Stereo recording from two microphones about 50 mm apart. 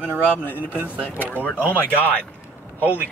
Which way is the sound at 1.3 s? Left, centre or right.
Left.